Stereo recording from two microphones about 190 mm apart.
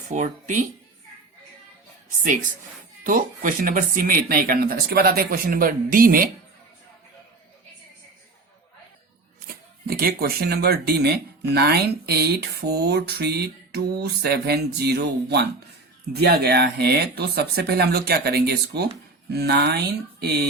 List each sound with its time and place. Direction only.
0.1 s speech: 40° right (ahead or behind)
2.0 s speech: 45° right (ahead or behind)
9.5 s a sound: 50° right (ahead or behind)
9.8 s speech: 50° right (ahead or behind)